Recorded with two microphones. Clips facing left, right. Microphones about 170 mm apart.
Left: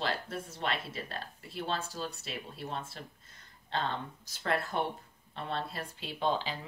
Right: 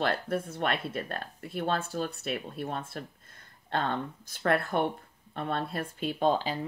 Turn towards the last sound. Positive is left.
turn(degrees=-45)  # may be behind; listen again after turning